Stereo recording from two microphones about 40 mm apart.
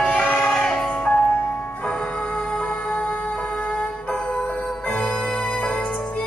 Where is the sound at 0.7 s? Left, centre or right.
Centre.